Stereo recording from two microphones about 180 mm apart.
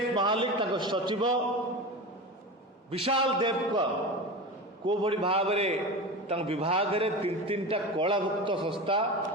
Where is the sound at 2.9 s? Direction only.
30° right (ahead or behind).